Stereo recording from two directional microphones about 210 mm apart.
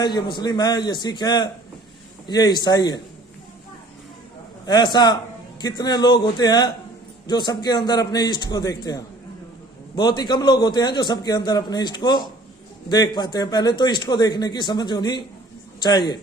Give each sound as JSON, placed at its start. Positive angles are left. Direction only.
{"t": 0.0, "sound": "a man's voice", "side_deg": 20}
{"t": 4.6, "sound": "a man's voice", "side_deg": 20}